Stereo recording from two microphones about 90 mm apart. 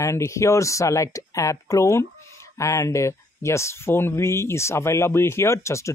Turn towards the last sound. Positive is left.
turn(degrees=35)  # may be behind; listen again after turning